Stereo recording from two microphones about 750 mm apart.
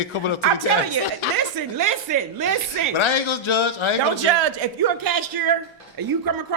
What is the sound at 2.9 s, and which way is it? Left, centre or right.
A man's voice, left.